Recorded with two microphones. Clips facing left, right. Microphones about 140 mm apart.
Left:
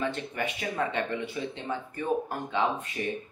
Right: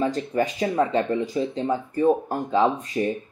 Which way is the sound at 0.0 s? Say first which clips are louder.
Right 8 dB; 35° right (ahead or behind).